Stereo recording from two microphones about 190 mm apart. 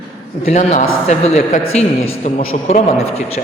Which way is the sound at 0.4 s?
35° left (ahead or behind).